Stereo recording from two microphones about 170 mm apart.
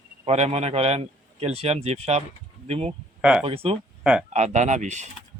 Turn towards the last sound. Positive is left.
turn(degrees=-45)  # may be behind; listen again after turning